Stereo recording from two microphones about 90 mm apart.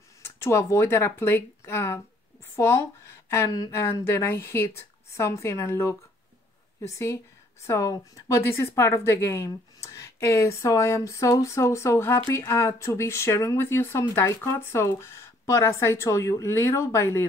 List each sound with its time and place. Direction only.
0.2 s speech: 30° left (ahead or behind)
7.6 s speech: 35° left (ahead or behind)